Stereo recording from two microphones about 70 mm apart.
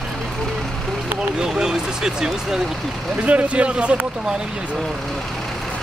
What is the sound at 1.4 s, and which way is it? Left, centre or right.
Speech, centre.